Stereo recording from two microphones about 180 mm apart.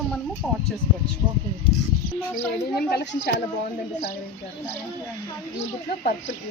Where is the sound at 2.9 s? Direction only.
65° left (ahead or behind).